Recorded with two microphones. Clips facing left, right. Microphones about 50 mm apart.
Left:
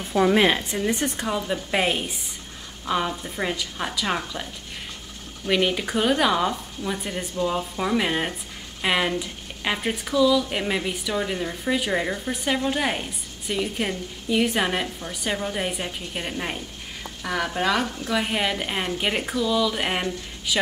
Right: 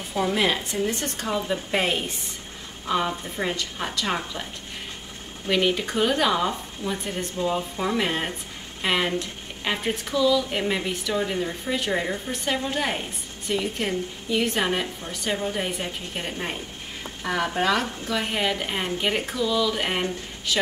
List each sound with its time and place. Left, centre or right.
0.3 s speech: left
1.3 s speech: centre
5.5 s speech: centre
17.2 s speech: centre